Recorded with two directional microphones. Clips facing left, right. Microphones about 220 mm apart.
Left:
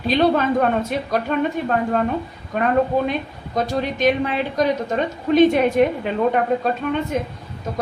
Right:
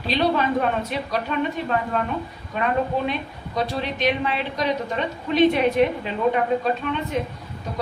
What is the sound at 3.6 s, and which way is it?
A woman's voice, 45° left (ahead or behind).